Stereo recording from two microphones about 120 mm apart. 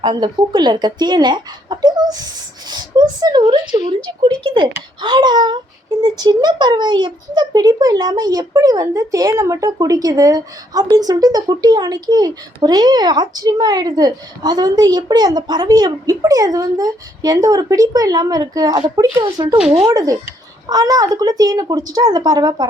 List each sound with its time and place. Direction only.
0.0 s a woman's voice: 35° right (ahead or behind)
18.9 s a woman's voice: 40° right (ahead or behind)
19.8 s a woman's voice: 30° right (ahead or behind)